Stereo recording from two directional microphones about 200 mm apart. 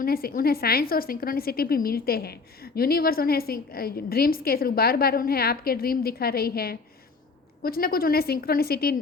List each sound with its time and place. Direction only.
0.0 s a woman's voice: 50° left (ahead or behind)